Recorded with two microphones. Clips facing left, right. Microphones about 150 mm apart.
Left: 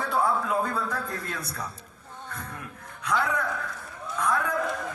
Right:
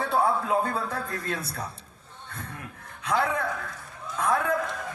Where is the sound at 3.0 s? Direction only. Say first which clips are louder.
Right 1 dB; 30° right (ahead or behind).